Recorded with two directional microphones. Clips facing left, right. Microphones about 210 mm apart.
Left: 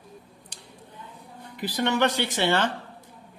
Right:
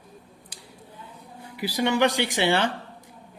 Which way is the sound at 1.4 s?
10° right (ahead or behind).